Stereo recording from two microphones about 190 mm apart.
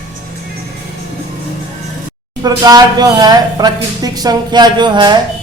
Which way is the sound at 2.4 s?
20° right (ahead or behind).